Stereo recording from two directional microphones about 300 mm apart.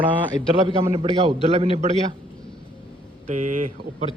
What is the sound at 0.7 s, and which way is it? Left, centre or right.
A man's voice, centre.